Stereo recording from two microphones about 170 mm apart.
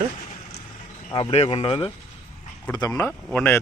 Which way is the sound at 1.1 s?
30° left (ahead or behind).